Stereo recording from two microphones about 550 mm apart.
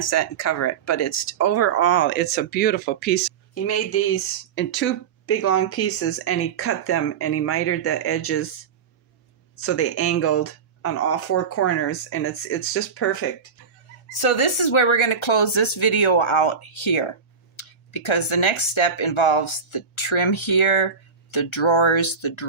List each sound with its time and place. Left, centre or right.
0.0 s speech: left
9.6 s speech: left
14.1 s speech: left